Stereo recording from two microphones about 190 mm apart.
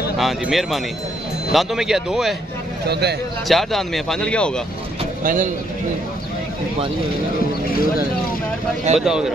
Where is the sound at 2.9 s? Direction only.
60° right (ahead or behind).